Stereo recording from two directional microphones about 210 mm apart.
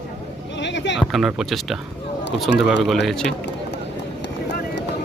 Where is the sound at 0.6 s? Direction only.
55° left (ahead or behind).